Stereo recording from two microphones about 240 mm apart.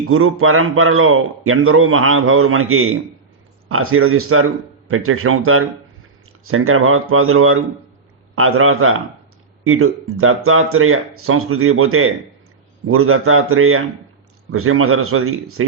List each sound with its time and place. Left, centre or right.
0.1 s a man's voice: right